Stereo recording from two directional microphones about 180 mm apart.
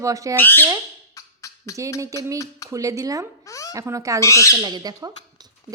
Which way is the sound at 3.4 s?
15° left (ahead or behind).